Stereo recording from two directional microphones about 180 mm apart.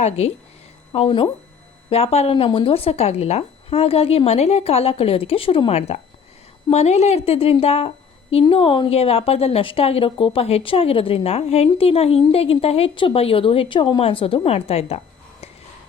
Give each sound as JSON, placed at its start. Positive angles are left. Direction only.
{"t": 0.9, "sound": "a woman's voice", "side_deg": 35}